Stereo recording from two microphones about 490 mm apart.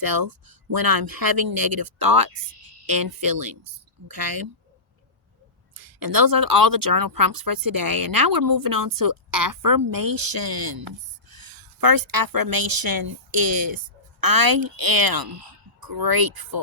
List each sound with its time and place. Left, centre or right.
0.0 s speech: right
5.7 s a woman's voice: right